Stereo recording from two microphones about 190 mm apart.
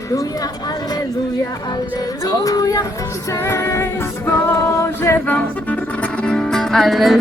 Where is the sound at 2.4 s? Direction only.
20° left (ahead or behind).